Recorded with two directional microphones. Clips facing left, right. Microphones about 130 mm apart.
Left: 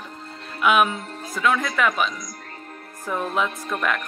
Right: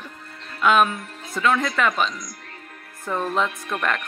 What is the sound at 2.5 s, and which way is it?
Music, 35° left (ahead or behind).